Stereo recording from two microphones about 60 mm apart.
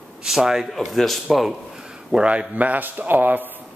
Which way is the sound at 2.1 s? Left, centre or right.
Centre.